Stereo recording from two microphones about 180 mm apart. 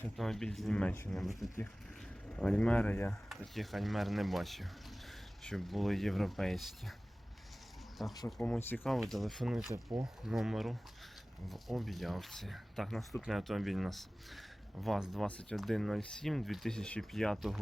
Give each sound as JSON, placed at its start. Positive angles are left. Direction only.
{"t": 0.2, "sound": "speech", "side_deg": 0}
{"t": 1.1, "sound": "speech", "side_deg": 0}
{"t": 3.2, "sound": "speech", "side_deg": 0}
{"t": 8.3, "sound": "speech", "side_deg": 5}
{"t": 9.7, "sound": "speech", "side_deg": -20}
{"t": 10.2, "sound": "speech", "side_deg": 0}